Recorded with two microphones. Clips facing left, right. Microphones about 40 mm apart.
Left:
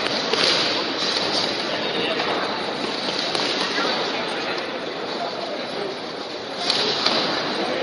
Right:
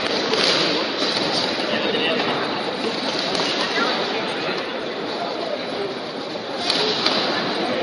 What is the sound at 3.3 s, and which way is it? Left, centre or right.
Fireworks, centre.